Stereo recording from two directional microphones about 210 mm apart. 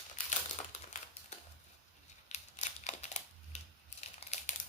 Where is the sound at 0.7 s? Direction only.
30° left (ahead or behind).